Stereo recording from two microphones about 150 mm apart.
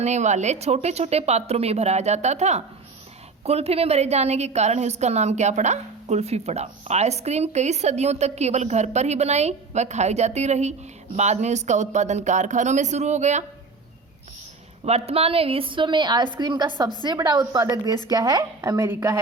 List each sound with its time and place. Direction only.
0.0 s a woman's voice: 50° right (ahead or behind)
14.8 s a woman's voice: 45° right (ahead or behind); by 19.2 s 20° right (ahead or behind)